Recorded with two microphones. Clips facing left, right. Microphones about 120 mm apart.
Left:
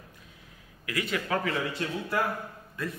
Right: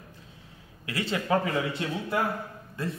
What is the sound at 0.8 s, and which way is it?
Speech, 30° right (ahead or behind).